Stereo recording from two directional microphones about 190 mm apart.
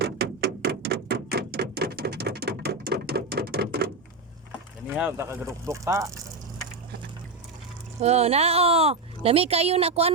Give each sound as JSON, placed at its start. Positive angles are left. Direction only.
{"t": 0.0, "sound": "a sound", "side_deg": -60}
{"t": 4.9, "sound": "speech", "side_deg": -10}
{"t": 8.0, "sound": "speech", "side_deg": -35}